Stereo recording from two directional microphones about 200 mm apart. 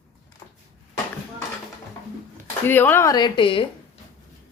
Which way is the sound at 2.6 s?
10° left (ahead or behind).